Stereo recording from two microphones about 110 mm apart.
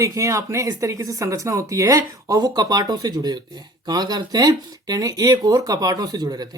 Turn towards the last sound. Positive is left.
turn(degrees=-35)  # may be behind; listen again after turning